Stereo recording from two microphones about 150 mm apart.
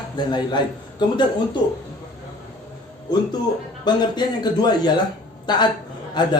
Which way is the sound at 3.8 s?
30° left (ahead or behind).